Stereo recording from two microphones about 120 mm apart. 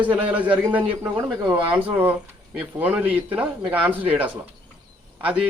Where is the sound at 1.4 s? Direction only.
40° right (ahead or behind).